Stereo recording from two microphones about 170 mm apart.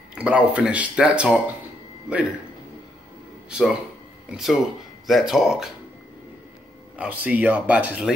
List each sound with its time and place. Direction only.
0.1 s speech: 5° right (ahead or behind)
3.4 s speech: 5° right (ahead or behind)
7.0 s speech: 10° right (ahead or behind)